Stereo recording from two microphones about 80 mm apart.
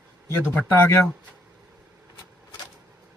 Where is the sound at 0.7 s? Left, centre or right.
Left.